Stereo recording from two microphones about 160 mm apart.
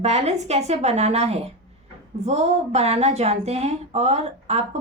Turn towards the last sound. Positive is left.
turn(degrees=-40)  # may be behind; listen again after turning